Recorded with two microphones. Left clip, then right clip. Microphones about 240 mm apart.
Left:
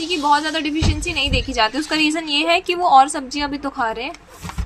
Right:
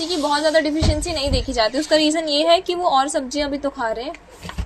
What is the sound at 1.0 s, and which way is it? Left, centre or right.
Speech, left.